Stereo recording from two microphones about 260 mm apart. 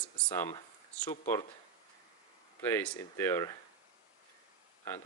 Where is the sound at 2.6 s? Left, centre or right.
Centre.